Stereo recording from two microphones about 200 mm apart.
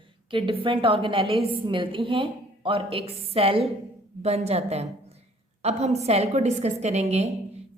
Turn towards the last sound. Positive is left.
turn(degrees=-35)  # may be behind; listen again after turning